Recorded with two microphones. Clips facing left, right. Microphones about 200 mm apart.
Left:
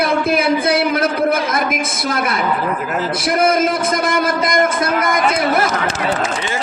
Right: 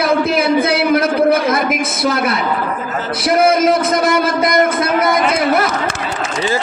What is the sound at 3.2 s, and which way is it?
Speech, 50° left (ahead or behind).